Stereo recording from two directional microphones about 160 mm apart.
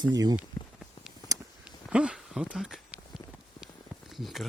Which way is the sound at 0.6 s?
15° left (ahead or behind).